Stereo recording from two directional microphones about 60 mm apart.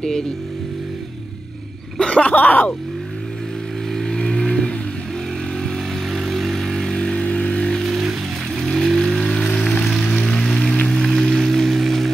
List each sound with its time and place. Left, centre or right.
2.0 s a sound: centre
2.3 s speech: left
3.9 s vehicle: centre
6.1 s vehicle: centre
7.8 s music: centre
8.6 s vehicle: centre
9.5 s music: centre
9.8 s music: centre